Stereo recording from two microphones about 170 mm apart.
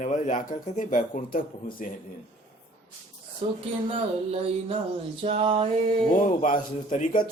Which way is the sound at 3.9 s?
35° right (ahead or behind).